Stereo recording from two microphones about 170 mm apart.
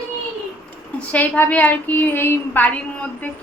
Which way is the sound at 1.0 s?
10° left (ahead or behind).